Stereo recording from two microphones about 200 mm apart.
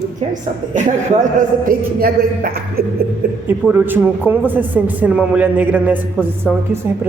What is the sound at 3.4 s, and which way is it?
A woman's voice, 10° right (ahead or behind).